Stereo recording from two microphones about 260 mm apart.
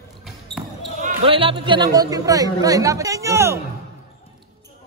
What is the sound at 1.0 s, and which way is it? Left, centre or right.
Speech, right.